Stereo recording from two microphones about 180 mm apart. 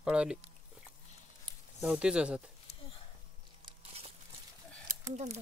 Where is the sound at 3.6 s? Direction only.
30° right (ahead or behind).